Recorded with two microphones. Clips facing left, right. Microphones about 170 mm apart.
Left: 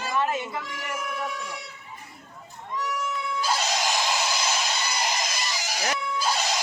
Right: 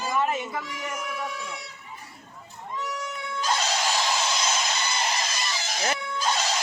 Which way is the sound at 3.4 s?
10° left (ahead or behind).